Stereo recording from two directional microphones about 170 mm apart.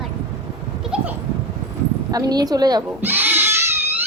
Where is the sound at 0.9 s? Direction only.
5° right (ahead or behind).